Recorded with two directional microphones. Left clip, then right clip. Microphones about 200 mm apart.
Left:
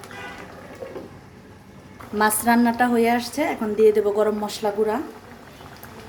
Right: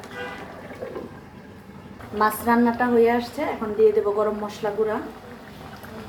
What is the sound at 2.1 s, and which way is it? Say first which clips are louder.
A woman's voice: left 1 dB; 55° left (ahead or behind).